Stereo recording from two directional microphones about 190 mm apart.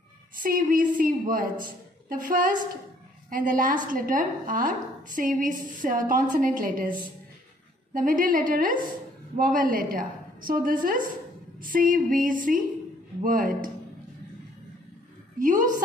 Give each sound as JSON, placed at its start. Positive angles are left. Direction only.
{"t": 0.4, "sound": "a woman's voice", "side_deg": -45}
{"t": 15.3, "sound": "a woman's voice", "side_deg": -45}